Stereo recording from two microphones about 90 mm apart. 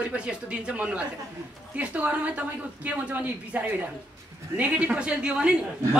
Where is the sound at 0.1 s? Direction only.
10° right (ahead or behind).